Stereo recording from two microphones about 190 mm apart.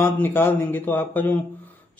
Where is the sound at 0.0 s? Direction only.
10° left (ahead or behind).